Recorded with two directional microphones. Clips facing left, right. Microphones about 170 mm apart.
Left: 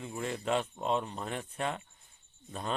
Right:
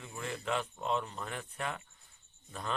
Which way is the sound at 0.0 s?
20° left (ahead or behind).